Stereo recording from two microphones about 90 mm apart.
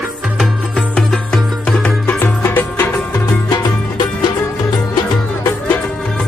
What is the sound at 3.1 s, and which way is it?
Music, 45° left (ahead or behind).